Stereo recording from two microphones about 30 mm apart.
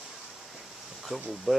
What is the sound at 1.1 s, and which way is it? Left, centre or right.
Speech, right.